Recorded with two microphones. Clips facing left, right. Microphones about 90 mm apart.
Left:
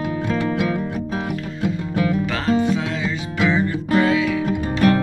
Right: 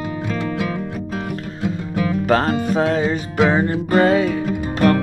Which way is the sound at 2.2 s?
45° right (ahead or behind).